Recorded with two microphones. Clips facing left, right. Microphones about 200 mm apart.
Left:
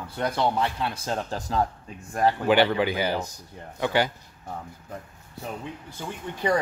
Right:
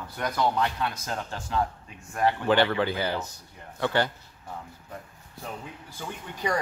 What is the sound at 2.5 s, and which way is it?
Speech, 15° left (ahead or behind).